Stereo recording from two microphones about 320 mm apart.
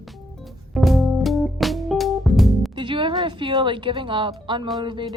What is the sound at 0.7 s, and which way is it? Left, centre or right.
Music, centre.